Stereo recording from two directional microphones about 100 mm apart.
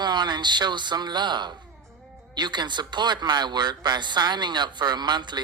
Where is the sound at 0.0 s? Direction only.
50° right (ahead or behind).